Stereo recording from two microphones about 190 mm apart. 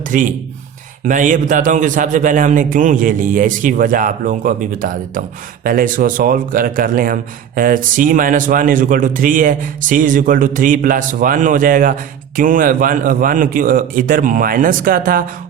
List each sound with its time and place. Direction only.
0.0 s a man's voice: 45° right (ahead or behind)